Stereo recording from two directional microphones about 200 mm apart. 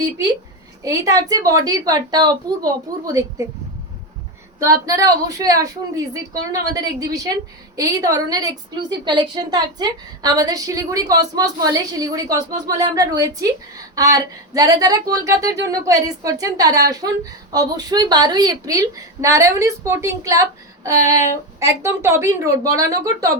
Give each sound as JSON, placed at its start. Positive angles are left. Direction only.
{"t": 0.8, "sound": "a woman's voice", "side_deg": -15}
{"t": 4.6, "sound": "a woman's voice", "side_deg": -15}